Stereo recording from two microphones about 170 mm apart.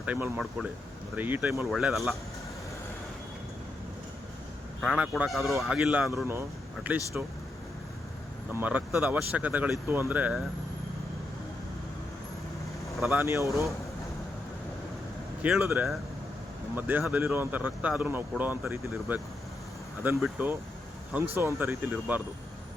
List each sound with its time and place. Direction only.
0.0 s speech: 10° right (ahead or behind)
4.8 s speech: centre (ahead or behind)
8.5 s speech: 10° right (ahead or behind)
13.1 s speech: 15° right (ahead or behind)
15.6 s speech: 15° right (ahead or behind)
21.3 s speech: 15° right (ahead or behind)